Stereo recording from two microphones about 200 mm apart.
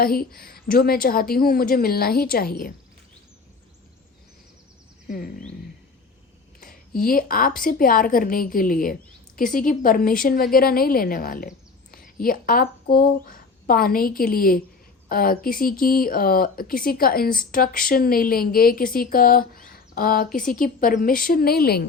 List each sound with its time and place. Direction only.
0.0 s a woman's voice: 50° left (ahead or behind)
5.0 s a woman's voice: 45° left (ahead or behind)
6.6 s a sound: 45° left (ahead or behind)
7.6 s a woman's voice: 45° left (ahead or behind)